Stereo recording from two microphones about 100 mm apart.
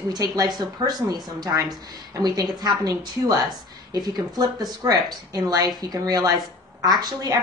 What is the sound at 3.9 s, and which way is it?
Speech, 45° right (ahead or behind).